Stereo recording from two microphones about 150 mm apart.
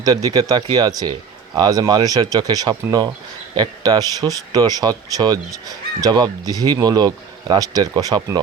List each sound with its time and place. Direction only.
0.0 s speech: 25° right (ahead or behind)